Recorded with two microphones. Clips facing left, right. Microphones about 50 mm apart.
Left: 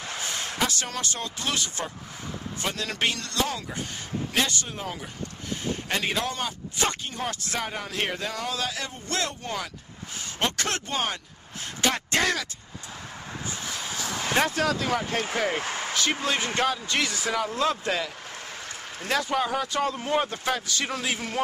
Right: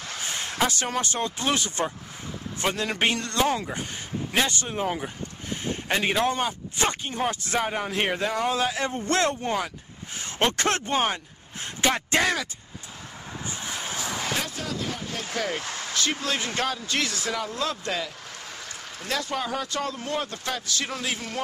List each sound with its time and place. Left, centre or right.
0.6 s speech: right
11.9 s speech: centre
13.7 s vehicle: right
14.6 s speech: left
15.2 s speech: left
15.9 s speech: centre